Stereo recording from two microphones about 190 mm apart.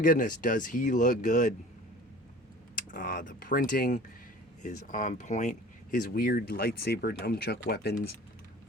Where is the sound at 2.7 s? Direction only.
45° left (ahead or behind).